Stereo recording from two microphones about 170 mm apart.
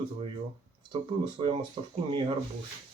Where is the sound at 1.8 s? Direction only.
30° right (ahead or behind).